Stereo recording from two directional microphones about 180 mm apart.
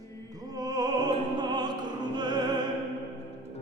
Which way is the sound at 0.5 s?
20° right (ahead or behind).